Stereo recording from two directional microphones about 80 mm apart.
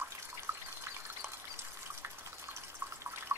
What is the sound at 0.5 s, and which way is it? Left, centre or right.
Water, right.